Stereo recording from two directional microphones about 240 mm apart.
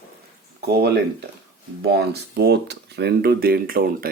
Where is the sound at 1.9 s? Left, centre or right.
Right.